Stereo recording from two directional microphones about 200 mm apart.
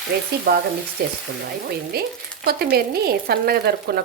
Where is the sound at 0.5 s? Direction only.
45° right (ahead or behind).